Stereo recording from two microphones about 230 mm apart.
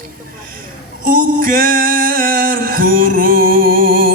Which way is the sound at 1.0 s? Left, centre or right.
Right.